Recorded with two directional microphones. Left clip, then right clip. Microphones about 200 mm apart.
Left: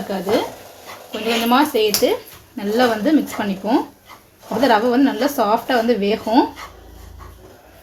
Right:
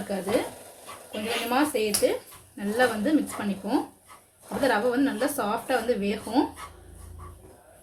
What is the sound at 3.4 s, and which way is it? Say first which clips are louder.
Speech: left 9 dB; 30° left (ahead or behind).